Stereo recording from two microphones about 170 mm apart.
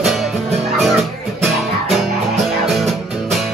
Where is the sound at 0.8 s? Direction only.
Centre (ahead or behind).